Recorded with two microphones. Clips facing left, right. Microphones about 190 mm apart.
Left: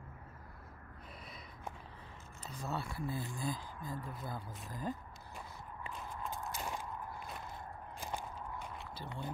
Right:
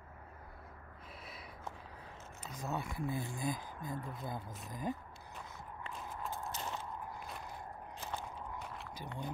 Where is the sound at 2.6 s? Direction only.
20° right (ahead or behind).